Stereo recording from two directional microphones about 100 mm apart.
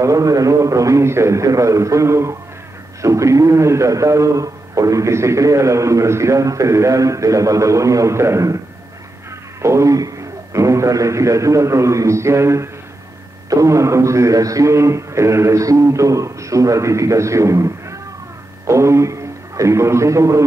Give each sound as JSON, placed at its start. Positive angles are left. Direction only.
{"t": 0.0, "sound": "a man's voice", "side_deg": -35}
{"t": 9.6, "sound": "a man's voice", "side_deg": -30}